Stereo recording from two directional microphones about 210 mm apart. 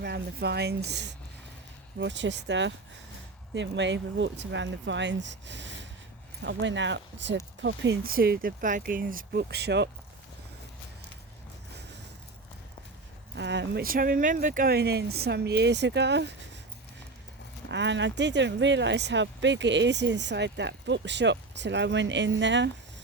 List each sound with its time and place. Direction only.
0.0 s speech: 50° right (ahead or behind)
13.3 s speech: 55° right (ahead or behind)
17.7 s speech: 55° right (ahead or behind)